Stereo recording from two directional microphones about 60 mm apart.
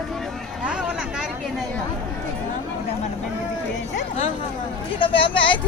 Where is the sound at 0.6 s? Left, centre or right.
Centre.